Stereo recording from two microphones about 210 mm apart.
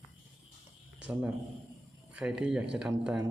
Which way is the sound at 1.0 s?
5° right (ahead or behind).